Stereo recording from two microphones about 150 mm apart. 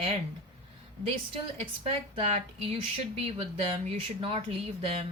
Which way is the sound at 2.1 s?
45° right (ahead or behind).